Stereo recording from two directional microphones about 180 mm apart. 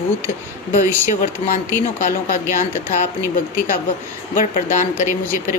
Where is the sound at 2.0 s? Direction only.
50° left (ahead or behind).